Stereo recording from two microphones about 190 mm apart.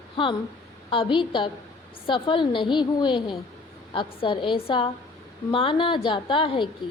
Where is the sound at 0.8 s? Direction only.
25° left (ahead or behind).